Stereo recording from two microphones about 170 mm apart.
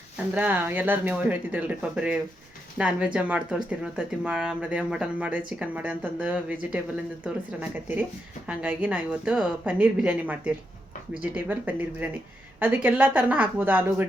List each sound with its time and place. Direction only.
0.3 s speech: 10° right (ahead or behind)